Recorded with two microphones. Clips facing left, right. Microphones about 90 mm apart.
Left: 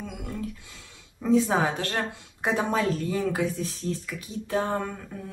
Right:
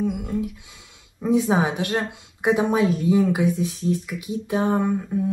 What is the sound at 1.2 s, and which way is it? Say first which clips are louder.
Speech: right 2 dB; 15° right (ahead or behind).